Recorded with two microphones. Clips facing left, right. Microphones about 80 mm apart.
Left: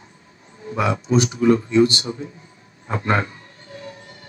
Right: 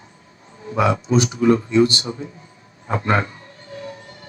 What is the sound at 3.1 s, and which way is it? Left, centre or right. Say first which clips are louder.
Music: even; right.